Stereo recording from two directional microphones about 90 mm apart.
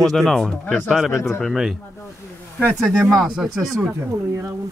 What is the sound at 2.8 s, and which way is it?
Speech, centre (ahead or behind).